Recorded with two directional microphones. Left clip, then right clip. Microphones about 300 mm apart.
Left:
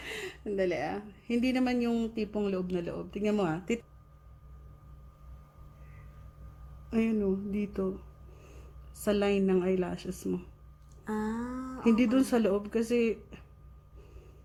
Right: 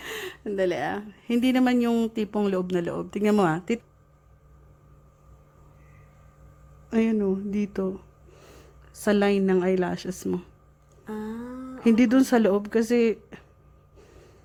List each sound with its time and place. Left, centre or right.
0.1 s speech: centre
6.9 s speech: centre
9.0 s speech: centre
11.0 s a sound: centre
11.8 s speech: centre